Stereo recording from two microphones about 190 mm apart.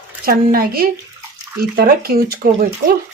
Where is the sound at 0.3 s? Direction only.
50° right (ahead or behind).